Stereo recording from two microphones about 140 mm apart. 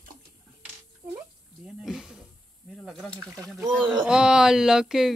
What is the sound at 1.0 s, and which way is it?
Speech, 20° right (ahead or behind).